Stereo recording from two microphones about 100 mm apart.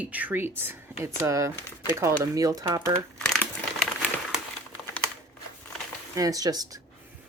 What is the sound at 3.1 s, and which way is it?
Crumpling, 5° left (ahead or behind).